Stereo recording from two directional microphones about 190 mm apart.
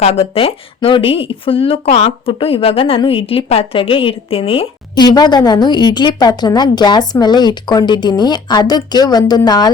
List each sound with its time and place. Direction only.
0.0 s speech: 30° left (ahead or behind)